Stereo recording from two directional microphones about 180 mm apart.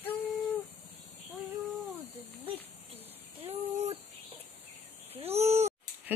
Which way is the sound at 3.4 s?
30° right (ahead or behind).